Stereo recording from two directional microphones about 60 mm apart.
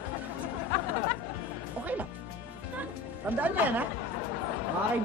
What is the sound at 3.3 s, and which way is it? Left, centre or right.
Speech, right.